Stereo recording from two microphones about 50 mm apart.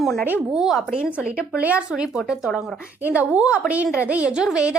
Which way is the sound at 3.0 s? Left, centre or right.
Right.